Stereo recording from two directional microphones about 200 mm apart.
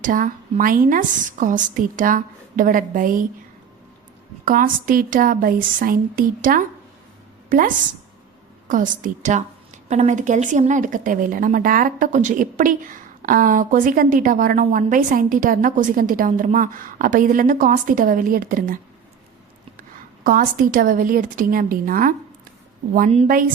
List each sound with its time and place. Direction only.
0.0 s a woman's voice: 40° right (ahead or behind)
4.4 s a woman's voice: 45° right (ahead or behind)
8.6 s a woman's voice: 40° right (ahead or behind)
20.2 s a woman's voice: 45° right (ahead or behind)